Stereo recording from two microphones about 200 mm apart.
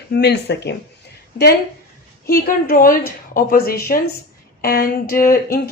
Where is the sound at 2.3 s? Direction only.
45° left (ahead or behind).